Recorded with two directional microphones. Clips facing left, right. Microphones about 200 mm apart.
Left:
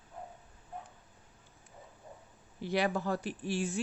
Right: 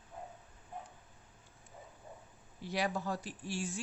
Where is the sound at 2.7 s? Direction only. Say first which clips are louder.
Left 5 dB; 60° left (ahead or behind).